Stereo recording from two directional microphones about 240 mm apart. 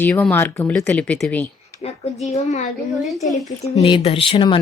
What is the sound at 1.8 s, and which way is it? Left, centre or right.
Speech, left.